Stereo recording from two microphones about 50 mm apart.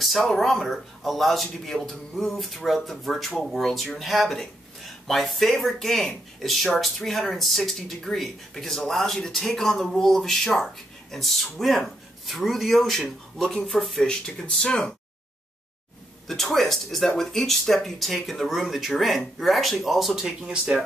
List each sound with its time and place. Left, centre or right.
0.0 s speech: centre
13.9 s speech: centre
16.3 s speech: centre